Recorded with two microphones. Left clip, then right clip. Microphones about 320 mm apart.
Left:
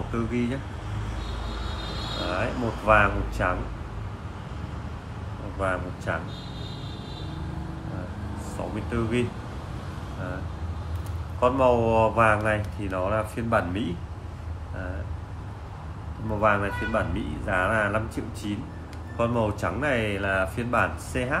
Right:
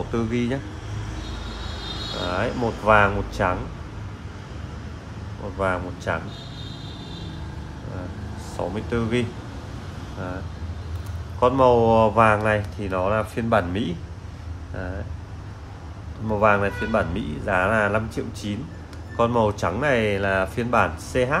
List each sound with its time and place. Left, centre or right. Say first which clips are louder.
0.1 s speech: right 3 dB; right
2.3 s speech: right 5 dB; right
5.6 s speech: right 3 dB; right
8.6 s speech: right 6 dB; right
11.3 s speech: right 4 dB; right
16.3 s speech: right 4 dB; right